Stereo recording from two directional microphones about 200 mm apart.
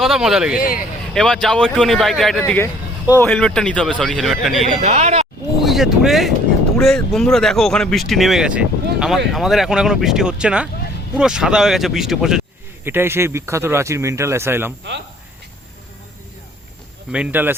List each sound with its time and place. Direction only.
0.0 s speech: centre (ahead or behind)
0.6 s speech: 45° left (ahead or behind)
1.1 s speech: centre (ahead or behind)
2.4 s speech: 10° left (ahead or behind)
4.8 s speech: 35° right (ahead or behind)
5.6 s speech: centre (ahead or behind)
17.1 s speech: 5° right (ahead or behind)